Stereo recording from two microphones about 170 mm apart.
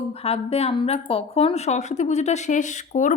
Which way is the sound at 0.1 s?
35° left (ahead or behind).